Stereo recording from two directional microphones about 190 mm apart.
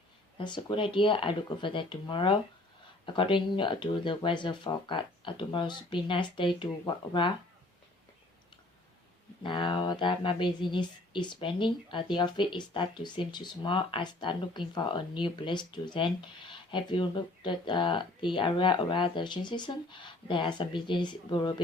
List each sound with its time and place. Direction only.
0.3 s speech: 25° left (ahead or behind)
9.4 s speech: 25° left (ahead or behind)